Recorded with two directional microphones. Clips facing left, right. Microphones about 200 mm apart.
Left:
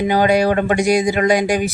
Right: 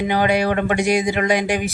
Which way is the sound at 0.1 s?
40° left (ahead or behind).